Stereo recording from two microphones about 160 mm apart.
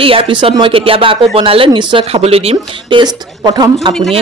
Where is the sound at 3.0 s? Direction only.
25° right (ahead or behind).